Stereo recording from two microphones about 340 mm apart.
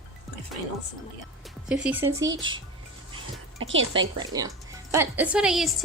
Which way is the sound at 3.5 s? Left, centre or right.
Right.